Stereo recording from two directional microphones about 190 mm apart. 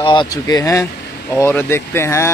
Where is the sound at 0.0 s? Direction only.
25° left (ahead or behind).